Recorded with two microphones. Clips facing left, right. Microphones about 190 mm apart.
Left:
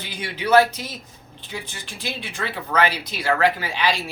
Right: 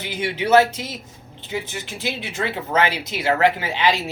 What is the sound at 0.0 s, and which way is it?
Speech, 20° right (ahead or behind).